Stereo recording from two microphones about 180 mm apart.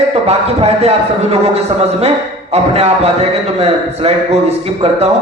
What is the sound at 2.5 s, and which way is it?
A man's voice, 35° right (ahead or behind).